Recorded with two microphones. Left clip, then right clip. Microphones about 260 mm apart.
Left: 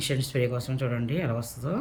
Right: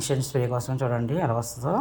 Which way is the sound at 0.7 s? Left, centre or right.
Right.